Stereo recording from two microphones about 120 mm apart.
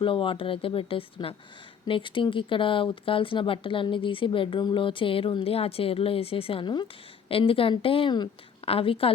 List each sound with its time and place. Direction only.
0.0 s speech: 45° left (ahead or behind)